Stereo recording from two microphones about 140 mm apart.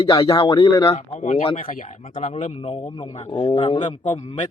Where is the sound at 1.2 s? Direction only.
50° left (ahead or behind).